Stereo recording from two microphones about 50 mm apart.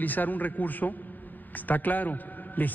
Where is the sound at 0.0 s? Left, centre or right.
Left.